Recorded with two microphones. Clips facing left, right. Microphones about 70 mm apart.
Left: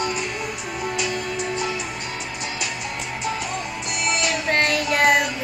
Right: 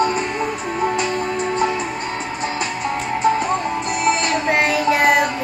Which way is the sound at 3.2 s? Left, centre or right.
Right.